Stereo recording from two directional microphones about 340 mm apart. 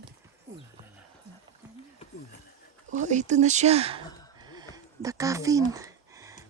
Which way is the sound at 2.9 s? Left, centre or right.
Right.